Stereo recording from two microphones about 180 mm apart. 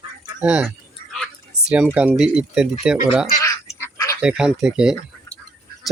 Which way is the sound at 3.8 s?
20° left (ahead or behind).